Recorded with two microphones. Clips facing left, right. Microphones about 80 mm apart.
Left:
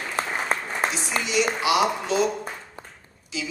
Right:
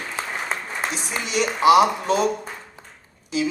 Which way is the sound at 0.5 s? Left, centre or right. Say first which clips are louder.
Left 4 dB; left.